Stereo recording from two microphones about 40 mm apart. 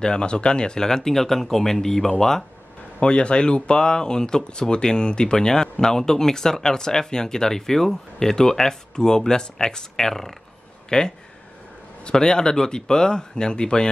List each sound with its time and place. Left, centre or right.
0.0 s speech: left
3.0 s speech: left; by 10.3 s centre
10.9 s speech: left